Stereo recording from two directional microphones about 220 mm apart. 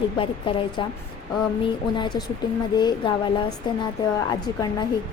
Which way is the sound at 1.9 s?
20° left (ahead or behind).